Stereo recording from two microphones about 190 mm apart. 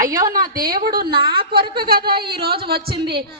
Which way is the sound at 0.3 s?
50° right (ahead or behind).